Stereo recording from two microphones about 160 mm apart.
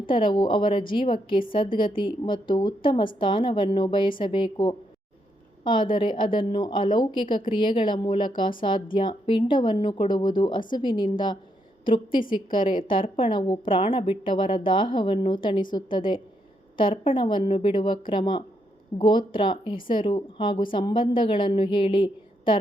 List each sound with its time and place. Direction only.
0.0 s a woman's voice: 30° left (ahead or behind)